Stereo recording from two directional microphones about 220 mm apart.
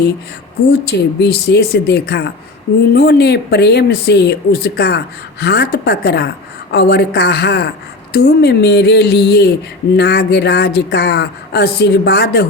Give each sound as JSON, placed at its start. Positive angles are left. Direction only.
{"t": 0.7, "sound": "speech", "side_deg": 45}